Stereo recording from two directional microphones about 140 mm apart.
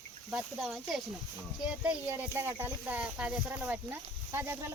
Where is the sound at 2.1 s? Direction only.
15° right (ahead or behind).